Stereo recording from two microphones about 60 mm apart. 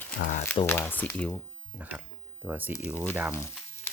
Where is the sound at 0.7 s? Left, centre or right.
Left.